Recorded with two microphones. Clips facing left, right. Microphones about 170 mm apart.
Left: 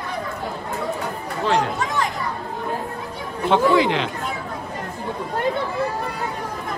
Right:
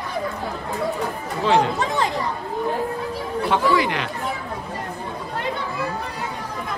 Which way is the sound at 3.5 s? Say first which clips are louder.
Left 4 dB; 20° left (ahead or behind).